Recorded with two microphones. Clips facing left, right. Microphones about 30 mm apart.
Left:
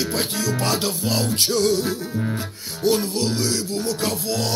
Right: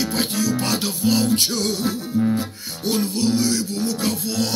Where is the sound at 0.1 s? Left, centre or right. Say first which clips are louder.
Right 2 dB; centre.